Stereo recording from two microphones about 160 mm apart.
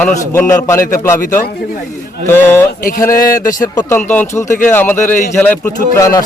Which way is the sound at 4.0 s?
10° left (ahead or behind).